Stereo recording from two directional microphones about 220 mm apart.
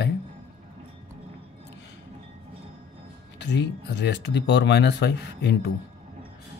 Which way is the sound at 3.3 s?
50° left (ahead or behind).